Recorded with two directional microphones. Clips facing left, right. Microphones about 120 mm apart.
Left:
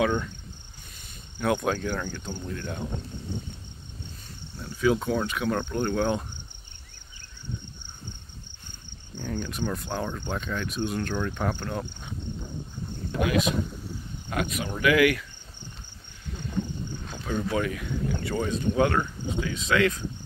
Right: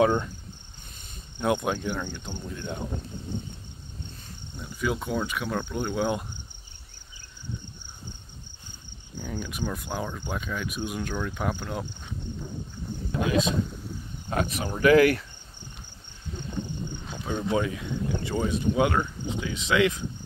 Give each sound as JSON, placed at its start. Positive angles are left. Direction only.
{"t": 0.0, "sound": "speech", "side_deg": -30}
{"t": 1.4, "sound": "speech", "side_deg": -15}
{"t": 4.7, "sound": "speech", "side_deg": 0}
{"t": 9.1, "sound": "speech", "side_deg": -10}
{"t": 13.2, "sound": "speech", "side_deg": -25}
{"t": 13.7, "sound": "cricket", "side_deg": 0}
{"t": 14.3, "sound": "speech", "side_deg": -35}
{"t": 17.0, "sound": "a sound", "side_deg": -5}
{"t": 17.3, "sound": "speech", "side_deg": -20}